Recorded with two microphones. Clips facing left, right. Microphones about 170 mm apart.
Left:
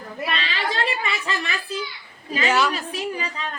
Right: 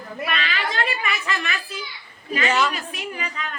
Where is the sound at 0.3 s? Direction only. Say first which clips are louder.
Even; 30° left (ahead or behind).